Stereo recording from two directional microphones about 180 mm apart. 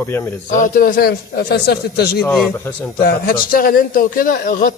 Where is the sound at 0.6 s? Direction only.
50° left (ahead or behind).